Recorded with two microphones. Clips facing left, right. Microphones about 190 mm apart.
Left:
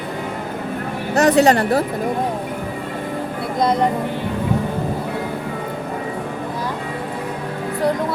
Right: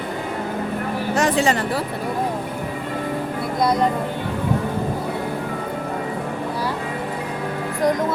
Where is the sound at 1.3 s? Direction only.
65° left (ahead or behind).